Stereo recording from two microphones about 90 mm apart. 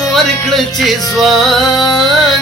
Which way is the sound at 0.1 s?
Centre (ahead or behind).